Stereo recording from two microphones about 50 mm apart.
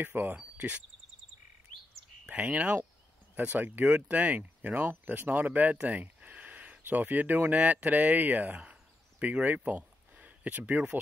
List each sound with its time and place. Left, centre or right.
0.0 s speech: right
2.2 s speech: right